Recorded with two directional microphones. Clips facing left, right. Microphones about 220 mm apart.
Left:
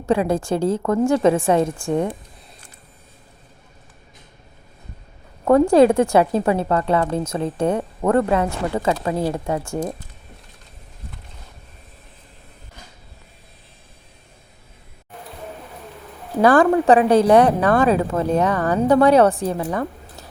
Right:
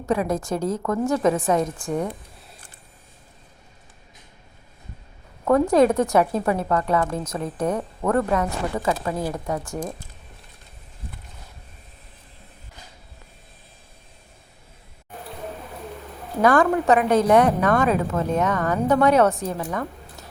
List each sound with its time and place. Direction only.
0.0 s speech: 30° left (ahead or behind)
5.5 s speech: 30° left (ahead or behind)
16.4 s a woman's voice: 30° left (ahead or behind)